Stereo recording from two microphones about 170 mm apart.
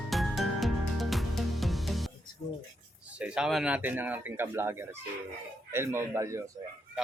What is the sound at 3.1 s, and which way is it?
Speech, 5° right (ahead or behind).